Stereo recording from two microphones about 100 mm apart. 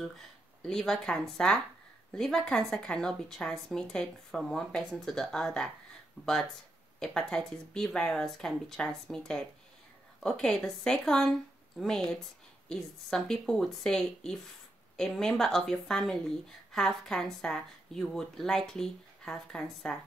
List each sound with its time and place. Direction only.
0.6 s a woman's voice: 5° left (ahead or behind)